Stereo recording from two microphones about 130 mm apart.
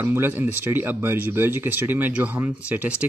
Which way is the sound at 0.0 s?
15° right (ahead or behind).